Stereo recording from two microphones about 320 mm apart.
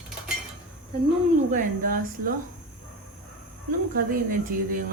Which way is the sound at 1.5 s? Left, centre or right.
Right.